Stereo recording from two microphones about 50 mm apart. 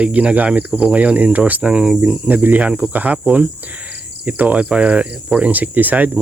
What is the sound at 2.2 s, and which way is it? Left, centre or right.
Speech, right.